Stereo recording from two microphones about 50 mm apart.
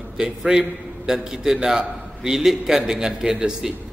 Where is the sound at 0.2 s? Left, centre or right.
Centre.